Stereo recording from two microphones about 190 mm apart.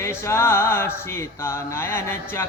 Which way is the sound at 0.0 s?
15° left (ahead or behind).